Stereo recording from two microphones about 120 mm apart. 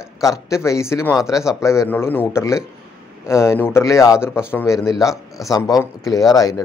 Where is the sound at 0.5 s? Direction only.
25° left (ahead or behind).